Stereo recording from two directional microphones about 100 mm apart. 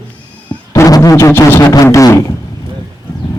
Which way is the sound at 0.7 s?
30° left (ahead or behind).